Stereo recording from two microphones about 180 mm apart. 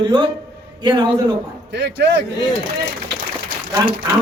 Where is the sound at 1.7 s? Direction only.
70° right (ahead or behind).